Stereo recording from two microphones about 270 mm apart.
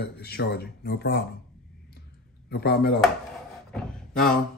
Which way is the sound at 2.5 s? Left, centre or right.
Left.